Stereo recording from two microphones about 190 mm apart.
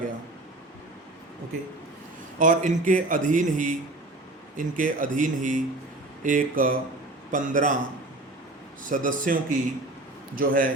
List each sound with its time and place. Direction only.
2.4 s speech: 40° right (ahead or behind)
8.8 s speech: 45° right (ahead or behind)